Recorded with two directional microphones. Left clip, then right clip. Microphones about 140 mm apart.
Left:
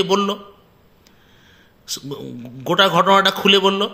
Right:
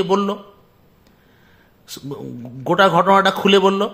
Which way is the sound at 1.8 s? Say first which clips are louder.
Left 2 dB; 30° right (ahead or behind).